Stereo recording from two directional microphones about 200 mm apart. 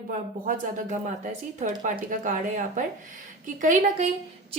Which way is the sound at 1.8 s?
40° right (ahead or behind).